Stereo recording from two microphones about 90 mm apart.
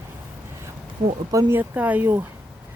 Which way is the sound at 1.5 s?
20° right (ahead or behind).